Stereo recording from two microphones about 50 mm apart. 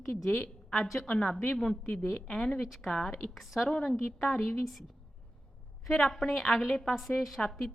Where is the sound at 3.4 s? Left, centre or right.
Centre.